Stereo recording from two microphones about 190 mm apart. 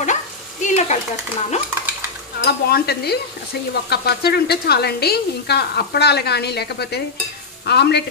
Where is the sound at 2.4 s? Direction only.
55° left (ahead or behind).